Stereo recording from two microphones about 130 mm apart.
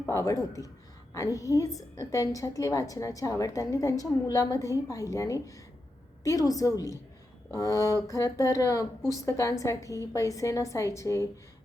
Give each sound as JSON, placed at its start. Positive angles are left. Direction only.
{"t": 0.1, "sound": "a woman's voice", "side_deg": 25}